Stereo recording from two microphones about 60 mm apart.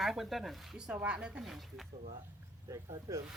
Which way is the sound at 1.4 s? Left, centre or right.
Centre.